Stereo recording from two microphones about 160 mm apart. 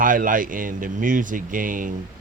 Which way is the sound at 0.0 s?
55° right (ahead or behind).